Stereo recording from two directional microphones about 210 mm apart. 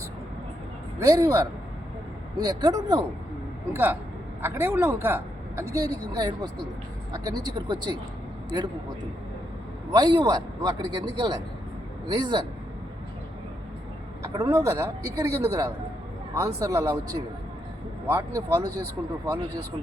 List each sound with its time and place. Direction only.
0.9 s a woman's voice: 15° right (ahead or behind)
9.9 s a man's voice: 20° right (ahead or behind)
14.3 s a woman's voice: 15° right (ahead or behind)